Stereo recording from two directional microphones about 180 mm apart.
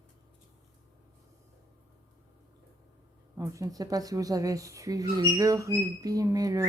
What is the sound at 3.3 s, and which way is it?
Speech, 15° right (ahead or behind).